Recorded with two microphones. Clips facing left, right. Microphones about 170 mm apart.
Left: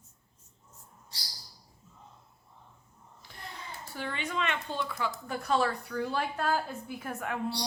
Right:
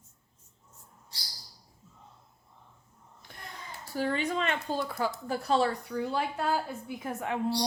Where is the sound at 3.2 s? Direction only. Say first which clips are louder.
Right 2 dB; 50° right (ahead or behind).